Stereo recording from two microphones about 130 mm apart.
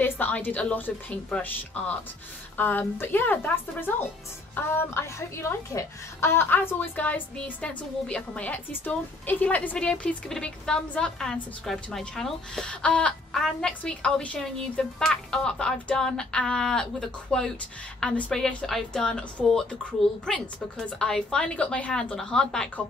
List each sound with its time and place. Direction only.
0.0 s a woman's voice: 15° left (ahead or behind)